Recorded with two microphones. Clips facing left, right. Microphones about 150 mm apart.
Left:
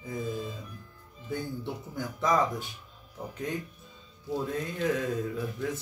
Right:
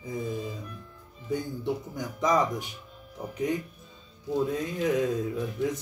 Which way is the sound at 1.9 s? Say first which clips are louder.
Even; 15° right (ahead or behind).